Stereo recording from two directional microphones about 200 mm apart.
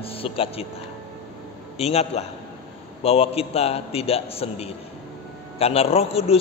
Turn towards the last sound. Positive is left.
turn(degrees=30)  # may be behind; listen again after turning